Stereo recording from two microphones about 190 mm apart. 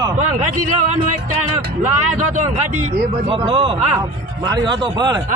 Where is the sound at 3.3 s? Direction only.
25° right (ahead or behind).